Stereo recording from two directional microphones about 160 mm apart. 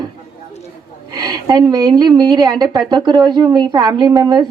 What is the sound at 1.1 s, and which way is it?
A woman's voice, 25° right (ahead or behind).